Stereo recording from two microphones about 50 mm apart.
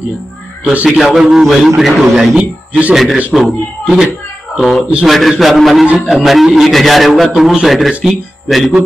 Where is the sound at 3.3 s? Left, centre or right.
Centre.